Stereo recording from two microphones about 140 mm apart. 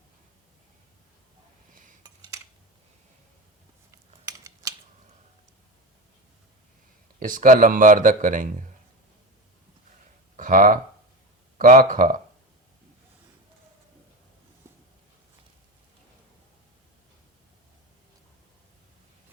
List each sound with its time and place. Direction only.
1.7 s cutlery: 70° right (ahead or behind)
3.9 s a sound: 25° right (ahead or behind)
7.2 s speech: 70° right (ahead or behind)
10.3 s speech: 65° right (ahead or behind)